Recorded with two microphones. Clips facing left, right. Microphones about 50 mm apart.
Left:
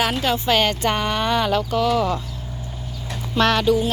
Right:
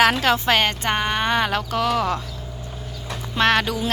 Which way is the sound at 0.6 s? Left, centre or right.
Right.